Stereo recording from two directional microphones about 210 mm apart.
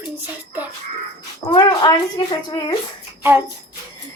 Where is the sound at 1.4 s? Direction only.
20° left (ahead or behind).